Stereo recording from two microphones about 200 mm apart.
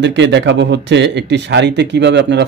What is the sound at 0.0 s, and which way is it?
Speech, 60° right (ahead or behind).